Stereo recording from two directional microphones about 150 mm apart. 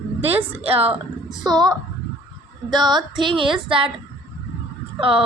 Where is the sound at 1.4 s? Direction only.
25° right (ahead or behind).